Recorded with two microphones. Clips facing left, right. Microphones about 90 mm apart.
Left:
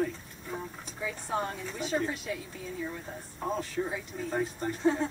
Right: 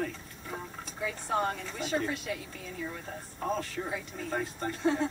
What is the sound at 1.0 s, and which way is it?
Speech, 15° left (ahead or behind).